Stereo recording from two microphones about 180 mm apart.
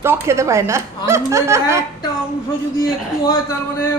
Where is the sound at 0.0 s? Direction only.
15° right (ahead or behind).